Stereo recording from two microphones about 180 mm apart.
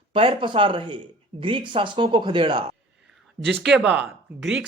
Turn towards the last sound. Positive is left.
turn(degrees=0)  # may be behind; listen again after turning